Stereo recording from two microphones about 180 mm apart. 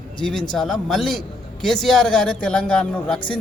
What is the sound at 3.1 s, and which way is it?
Speech, 30° left (ahead or behind).